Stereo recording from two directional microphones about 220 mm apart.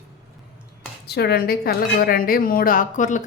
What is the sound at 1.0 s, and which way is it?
A woman's voice, 50° left (ahead or behind).